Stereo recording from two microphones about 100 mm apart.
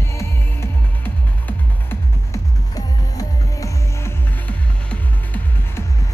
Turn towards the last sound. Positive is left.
turn(degrees=15)  # may be behind; listen again after turning